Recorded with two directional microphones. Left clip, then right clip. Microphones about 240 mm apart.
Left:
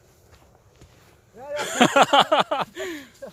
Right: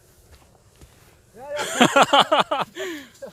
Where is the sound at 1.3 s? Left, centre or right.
Centre.